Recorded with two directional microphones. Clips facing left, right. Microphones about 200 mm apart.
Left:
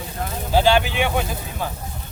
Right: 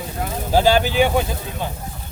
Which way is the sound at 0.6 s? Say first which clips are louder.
Right 3 dB; 40° right (ahead or behind).